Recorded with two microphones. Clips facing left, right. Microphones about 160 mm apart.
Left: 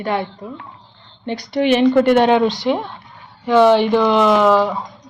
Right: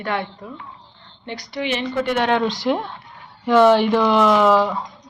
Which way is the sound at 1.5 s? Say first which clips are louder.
Left 11 dB; 55° left (ahead or behind).